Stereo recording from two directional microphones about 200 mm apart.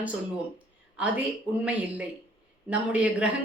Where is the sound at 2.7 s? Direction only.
5° right (ahead or behind).